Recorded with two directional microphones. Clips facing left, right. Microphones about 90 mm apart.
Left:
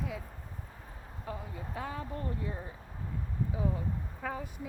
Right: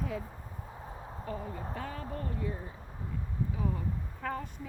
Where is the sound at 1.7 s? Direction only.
15° left (ahead or behind).